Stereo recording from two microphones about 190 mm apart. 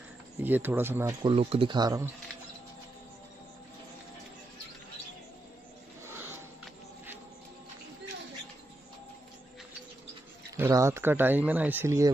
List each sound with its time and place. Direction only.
0.4 s speech: 10° right (ahead or behind)
1.4 s speech: 30° right (ahead or behind)
6.0 s a sound: 10° right (ahead or behind)
10.5 s speech: 15° right (ahead or behind)